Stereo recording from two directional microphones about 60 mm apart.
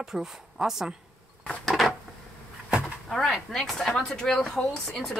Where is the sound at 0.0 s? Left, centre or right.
Centre.